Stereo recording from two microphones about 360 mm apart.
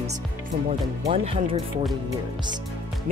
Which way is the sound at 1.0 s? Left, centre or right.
Centre.